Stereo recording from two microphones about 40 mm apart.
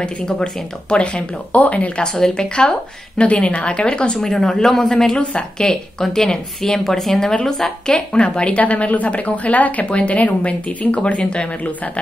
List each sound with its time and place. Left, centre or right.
0.0 s a woman's voice: left
2.3 s speech: centre
4.2 s a woman's voice: centre; by 11.9 s left